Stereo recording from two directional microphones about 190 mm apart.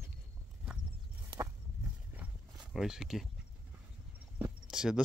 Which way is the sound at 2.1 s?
5° right (ahead or behind).